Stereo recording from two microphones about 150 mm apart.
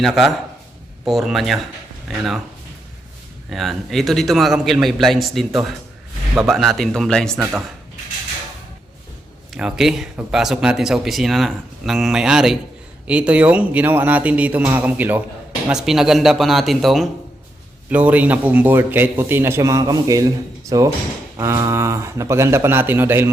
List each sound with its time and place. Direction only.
0.0 s speech: centre (ahead or behind)
3.5 s speech: centre (ahead or behind)
9.6 s a man's voice: 5° right (ahead or behind)